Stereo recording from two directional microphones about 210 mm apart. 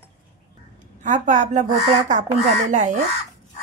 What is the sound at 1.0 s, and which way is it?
A woman's voice, 35° right (ahead or behind).